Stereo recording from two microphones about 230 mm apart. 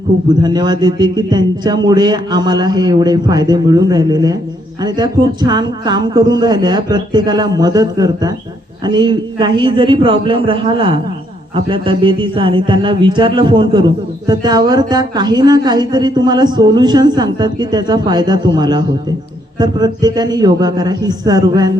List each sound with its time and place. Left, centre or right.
0.4 s a man's voice: centre